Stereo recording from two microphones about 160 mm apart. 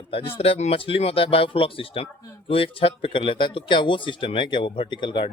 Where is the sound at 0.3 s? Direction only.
40° left (ahead or behind).